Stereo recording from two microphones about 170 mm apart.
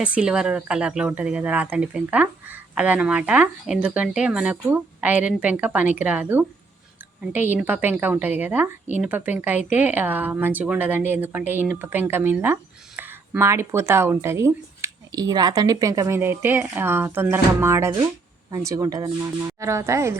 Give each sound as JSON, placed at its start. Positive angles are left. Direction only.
{"t": 0.0, "sound": "speech", "side_deg": -5}